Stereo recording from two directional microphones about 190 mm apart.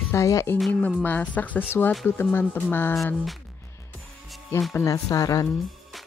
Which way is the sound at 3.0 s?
Centre (ahead or behind).